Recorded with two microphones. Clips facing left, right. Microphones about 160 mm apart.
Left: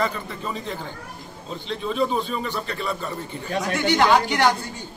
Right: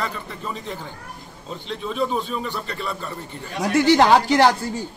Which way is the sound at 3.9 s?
35° right (ahead or behind).